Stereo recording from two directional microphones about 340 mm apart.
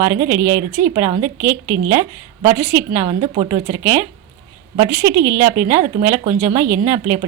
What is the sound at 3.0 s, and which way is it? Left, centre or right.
A woman's voice, centre.